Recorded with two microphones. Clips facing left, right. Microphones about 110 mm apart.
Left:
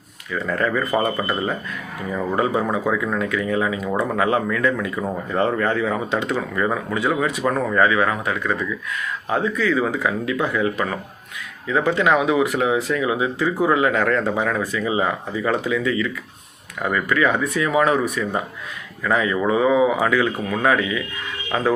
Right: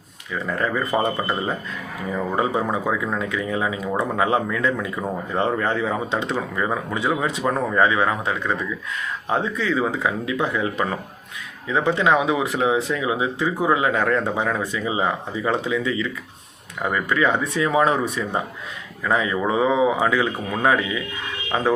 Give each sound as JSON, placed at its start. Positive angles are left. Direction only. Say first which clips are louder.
{"t": 0.3, "sound": "speech", "louder": "left 2 dB", "side_deg": -15}